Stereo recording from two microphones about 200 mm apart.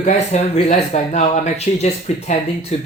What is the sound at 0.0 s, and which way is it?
Speech, 35° left (ahead or behind).